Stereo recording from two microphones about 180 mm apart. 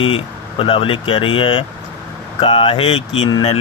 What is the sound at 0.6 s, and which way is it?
Speech, 30° left (ahead or behind).